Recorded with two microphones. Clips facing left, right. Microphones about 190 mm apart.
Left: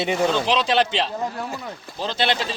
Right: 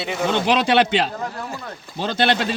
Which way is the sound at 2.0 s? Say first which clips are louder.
Right 3 dB; 60° right (ahead or behind).